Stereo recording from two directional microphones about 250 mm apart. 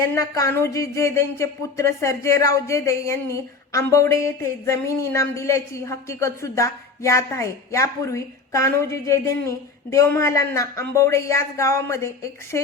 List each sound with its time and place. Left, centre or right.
0.0 s speech: centre